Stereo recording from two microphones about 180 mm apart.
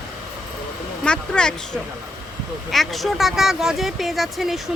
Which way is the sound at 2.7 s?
Centre (ahead or behind).